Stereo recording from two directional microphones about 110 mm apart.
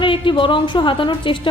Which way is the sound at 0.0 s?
50° left (ahead or behind).